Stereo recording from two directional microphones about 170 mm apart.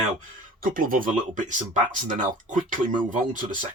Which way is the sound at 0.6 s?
55° right (ahead or behind).